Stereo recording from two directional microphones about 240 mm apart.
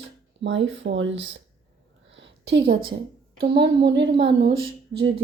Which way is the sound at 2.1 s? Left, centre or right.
Right.